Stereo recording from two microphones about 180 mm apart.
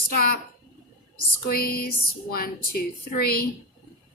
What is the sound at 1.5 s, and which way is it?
Speech, 55° left (ahead or behind).